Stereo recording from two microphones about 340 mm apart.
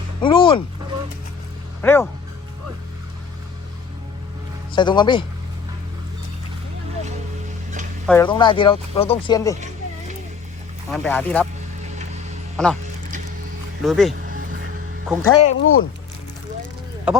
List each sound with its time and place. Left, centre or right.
0.2 s speech: centre
1.8 s speech: centre
4.7 s speech: centre
8.0 s speech: centre
10.9 s speech: centre
12.6 s speech: centre
13.8 s speech: centre
15.2 s speech: centre
15.5 s speech: left